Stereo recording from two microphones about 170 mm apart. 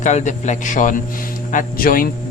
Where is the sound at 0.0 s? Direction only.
45° left (ahead or behind).